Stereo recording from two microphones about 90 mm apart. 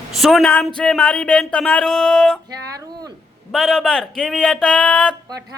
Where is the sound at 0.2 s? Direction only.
Centre (ahead or behind).